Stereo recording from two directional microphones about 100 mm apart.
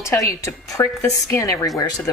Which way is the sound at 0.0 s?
30° left (ahead or behind).